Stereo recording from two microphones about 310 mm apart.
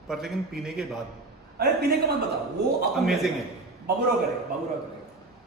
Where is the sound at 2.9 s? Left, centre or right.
Centre.